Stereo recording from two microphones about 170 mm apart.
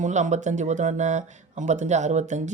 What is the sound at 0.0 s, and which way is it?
Speech, 45° right (ahead or behind).